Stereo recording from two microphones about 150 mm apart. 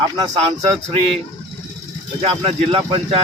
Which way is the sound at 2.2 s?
40° right (ahead or behind).